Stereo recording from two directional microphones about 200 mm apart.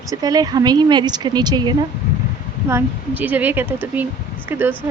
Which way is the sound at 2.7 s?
10° right (ahead or behind).